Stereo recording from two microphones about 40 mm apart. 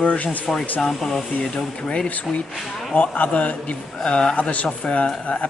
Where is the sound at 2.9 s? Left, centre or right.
Left.